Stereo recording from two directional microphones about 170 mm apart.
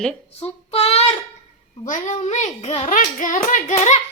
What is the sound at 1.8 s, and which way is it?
A child's voice, 45° left (ahead or behind).